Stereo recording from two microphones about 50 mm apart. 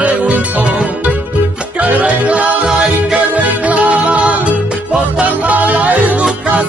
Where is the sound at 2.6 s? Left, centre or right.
Centre.